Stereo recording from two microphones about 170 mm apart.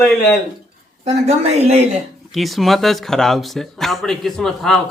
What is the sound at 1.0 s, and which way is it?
Speech, 40° right (ahead or behind).